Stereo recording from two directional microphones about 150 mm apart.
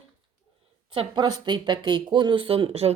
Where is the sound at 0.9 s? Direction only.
30° right (ahead or behind).